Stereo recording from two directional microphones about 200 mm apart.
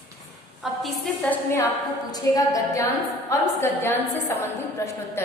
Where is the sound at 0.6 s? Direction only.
Centre (ahead or behind).